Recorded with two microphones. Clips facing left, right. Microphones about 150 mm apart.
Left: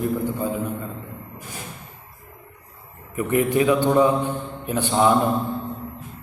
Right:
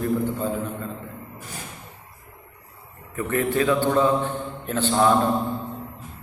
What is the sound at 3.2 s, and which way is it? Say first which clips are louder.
A man's voice: left 3 dB; 15° left (ahead or behind).